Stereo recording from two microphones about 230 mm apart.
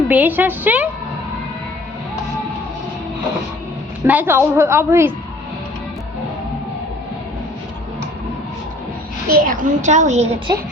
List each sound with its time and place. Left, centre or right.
0.1 s a woman's voice: centre
4.0 s a woman's voice: centre
9.3 s a woman's voice: right